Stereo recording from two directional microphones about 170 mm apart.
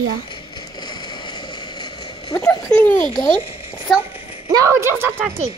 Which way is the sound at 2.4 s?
15° left (ahead or behind).